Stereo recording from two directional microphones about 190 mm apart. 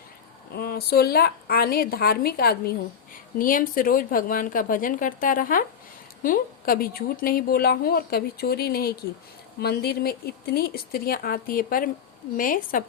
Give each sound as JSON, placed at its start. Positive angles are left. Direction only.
{"t": 0.5, "sound": "a woman's voice", "side_deg": 55}